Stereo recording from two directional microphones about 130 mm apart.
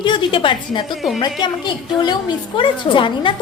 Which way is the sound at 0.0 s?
40° left (ahead or behind).